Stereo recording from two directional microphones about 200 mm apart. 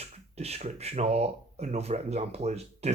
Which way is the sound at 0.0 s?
30° right (ahead or behind).